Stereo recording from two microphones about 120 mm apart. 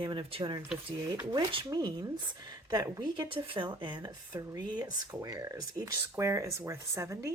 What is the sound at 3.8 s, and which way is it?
Speech, 35° right (ahead or behind).